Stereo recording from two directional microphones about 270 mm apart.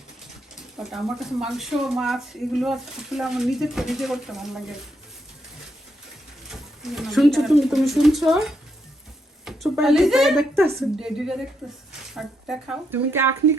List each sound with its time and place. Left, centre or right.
0.8 s speech: centre
6.5 s speech: centre